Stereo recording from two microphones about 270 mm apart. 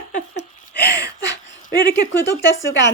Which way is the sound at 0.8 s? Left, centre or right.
Left.